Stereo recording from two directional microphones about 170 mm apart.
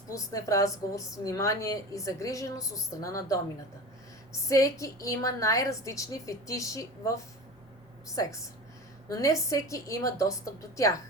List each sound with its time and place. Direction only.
0.1 s a woman's voice: 20° left (ahead or behind)
4.4 s a woman's voice: 20° left (ahead or behind)